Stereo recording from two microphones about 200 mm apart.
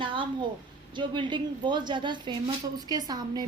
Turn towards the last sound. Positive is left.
turn(degrees=-20)  # may be behind; listen again after turning